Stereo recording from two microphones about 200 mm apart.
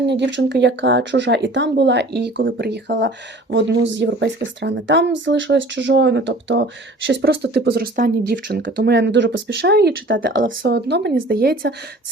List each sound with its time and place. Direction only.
0.1 s speech: 60° right (ahead or behind)